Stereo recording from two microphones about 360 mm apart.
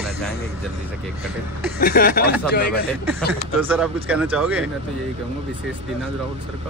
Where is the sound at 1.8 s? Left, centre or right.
Left.